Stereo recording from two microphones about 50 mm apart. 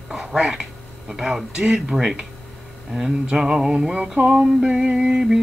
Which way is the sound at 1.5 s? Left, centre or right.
Centre.